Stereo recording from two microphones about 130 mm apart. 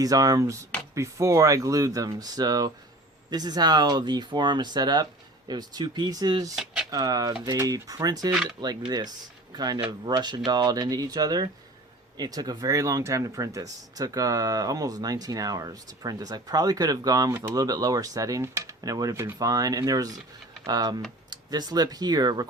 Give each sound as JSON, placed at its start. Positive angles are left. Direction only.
{"t": 0.0, "sound": "speech", "side_deg": -25}